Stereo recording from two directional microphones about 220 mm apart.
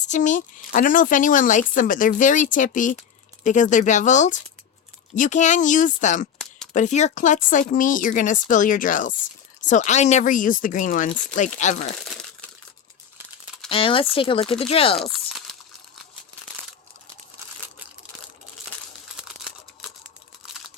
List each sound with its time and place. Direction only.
0.1 s speech: 35° left (ahead or behind)
13.7 s speech: 25° left (ahead or behind)